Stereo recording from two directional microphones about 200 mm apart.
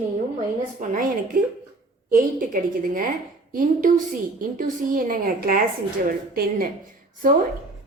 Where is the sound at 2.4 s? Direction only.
45° right (ahead or behind).